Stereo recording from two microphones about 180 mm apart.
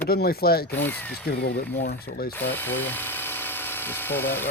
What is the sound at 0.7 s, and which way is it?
Speech, 10° left (ahead or behind).